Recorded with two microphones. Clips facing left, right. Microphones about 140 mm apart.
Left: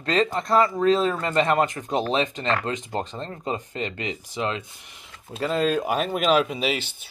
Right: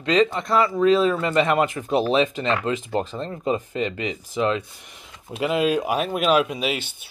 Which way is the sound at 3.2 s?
30° left (ahead or behind).